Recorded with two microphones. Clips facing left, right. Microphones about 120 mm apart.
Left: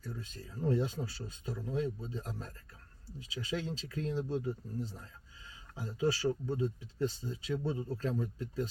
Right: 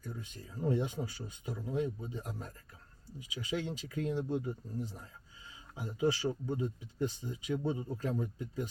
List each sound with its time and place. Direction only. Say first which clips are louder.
0.0 s speech: left 1 dB; 15° right (ahead or behind)